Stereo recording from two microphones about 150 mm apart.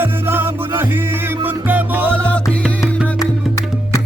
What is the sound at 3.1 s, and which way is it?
Music, 25° left (ahead or behind).